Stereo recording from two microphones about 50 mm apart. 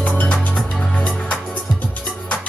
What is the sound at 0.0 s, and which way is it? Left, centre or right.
Music, left.